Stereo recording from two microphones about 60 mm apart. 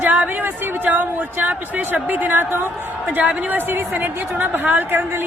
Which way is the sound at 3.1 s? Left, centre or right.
Right.